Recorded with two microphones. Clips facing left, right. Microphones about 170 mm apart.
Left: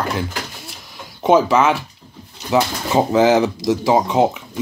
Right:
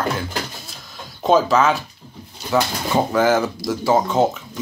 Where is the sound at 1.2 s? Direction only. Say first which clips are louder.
Left 2 dB; 10° left (ahead or behind).